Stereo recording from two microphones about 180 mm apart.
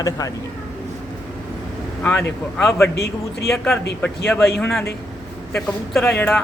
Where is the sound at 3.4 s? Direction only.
Centre (ahead or behind).